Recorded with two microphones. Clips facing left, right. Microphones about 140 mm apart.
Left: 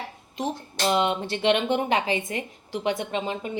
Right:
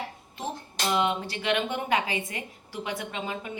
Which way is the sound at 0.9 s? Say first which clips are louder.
Left 3 dB; 25° left (ahead or behind).